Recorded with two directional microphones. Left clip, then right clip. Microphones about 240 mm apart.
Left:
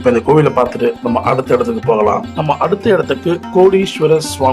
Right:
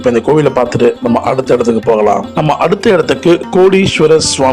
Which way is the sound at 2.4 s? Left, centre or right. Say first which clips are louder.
Right 3 dB; right.